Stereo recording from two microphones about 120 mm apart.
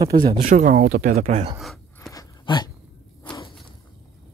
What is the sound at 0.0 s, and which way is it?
Speech, 35° right (ahead or behind).